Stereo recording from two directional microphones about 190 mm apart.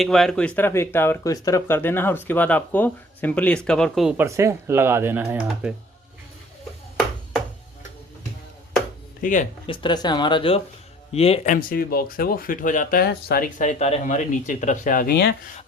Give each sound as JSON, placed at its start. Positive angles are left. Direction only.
{"t": 0.0, "sound": "speech", "side_deg": 0}
{"t": 4.4, "sound": "speech", "side_deg": -15}
{"t": 9.2, "sound": "speech", "side_deg": 40}
{"t": 9.6, "sound": "speech", "side_deg": 25}
{"t": 11.5, "sound": "speech", "side_deg": 50}